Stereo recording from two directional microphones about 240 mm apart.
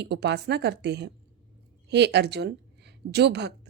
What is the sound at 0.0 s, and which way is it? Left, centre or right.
A woman's voice, right.